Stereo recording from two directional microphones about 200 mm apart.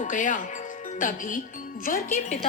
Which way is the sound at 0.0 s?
40° left (ahead or behind).